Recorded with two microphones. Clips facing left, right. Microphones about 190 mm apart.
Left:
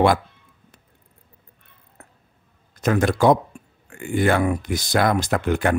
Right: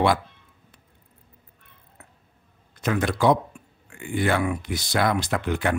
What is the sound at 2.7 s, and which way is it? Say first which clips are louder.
Speech: left 5 dB; 45° left (ahead or behind).